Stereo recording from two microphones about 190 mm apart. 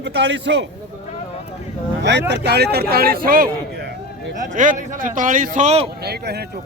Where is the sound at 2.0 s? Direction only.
65° right (ahead or behind); by 5.8 s 35° right (ahead or behind).